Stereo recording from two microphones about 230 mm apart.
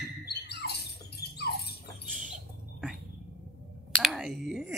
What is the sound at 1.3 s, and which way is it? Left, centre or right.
Rodents, left.